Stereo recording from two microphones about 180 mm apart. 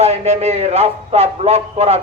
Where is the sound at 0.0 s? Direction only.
35° right (ahead or behind).